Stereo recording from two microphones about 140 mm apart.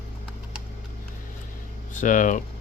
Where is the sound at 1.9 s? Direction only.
65° left (ahead or behind).